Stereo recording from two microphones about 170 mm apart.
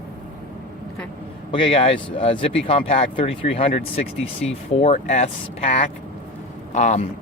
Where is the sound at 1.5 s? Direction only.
30° left (ahead or behind).